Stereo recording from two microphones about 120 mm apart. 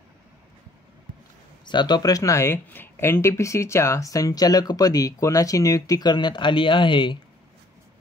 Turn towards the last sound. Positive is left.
turn(degrees=40)  # may be behind; listen again after turning